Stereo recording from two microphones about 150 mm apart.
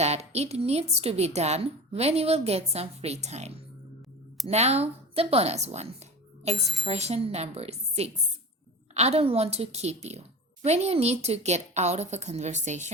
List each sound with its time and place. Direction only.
0.0 s a woman's voice: 45° right (ahead or behind)